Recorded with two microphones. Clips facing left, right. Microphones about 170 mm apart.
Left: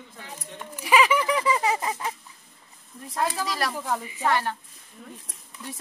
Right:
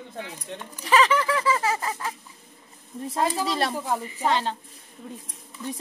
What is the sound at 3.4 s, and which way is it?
Speech, 25° right (ahead or behind).